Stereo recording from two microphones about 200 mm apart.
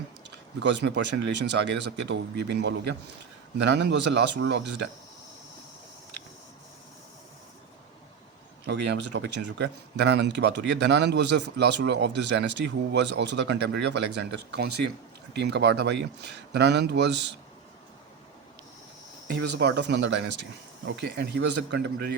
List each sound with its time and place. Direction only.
0.6 s speech: 60° right (ahead or behind)
8.6 s speech: 60° right (ahead or behind)
19.4 s speech: 55° right (ahead or behind)